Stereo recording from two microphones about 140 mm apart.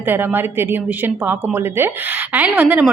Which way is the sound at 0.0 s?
15° right (ahead or behind).